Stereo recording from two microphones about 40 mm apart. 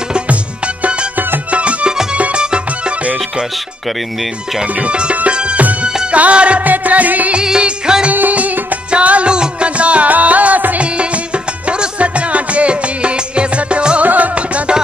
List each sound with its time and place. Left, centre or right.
1.5 s music: right
4.7 s music: right
5.6 s music: right
6.6 s music: right
7.3 s music: right
8.1 s music: right
8.9 s music: right
11.0 s music: right
14.0 s music: right